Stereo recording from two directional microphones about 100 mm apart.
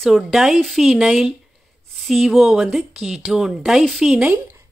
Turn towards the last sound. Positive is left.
turn(degrees=-5)  # may be behind; listen again after turning